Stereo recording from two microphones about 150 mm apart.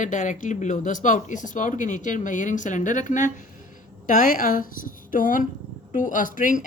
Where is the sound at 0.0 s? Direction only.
55° left (ahead or behind).